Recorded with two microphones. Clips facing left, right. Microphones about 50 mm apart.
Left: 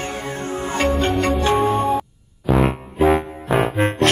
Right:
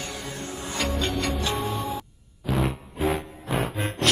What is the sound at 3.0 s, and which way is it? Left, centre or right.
Music, left.